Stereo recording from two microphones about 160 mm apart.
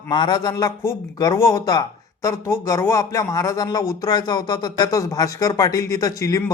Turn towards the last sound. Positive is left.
turn(degrees=20)  # may be behind; listen again after turning